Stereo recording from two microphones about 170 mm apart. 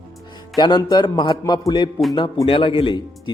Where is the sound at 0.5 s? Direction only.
25° left (ahead or behind).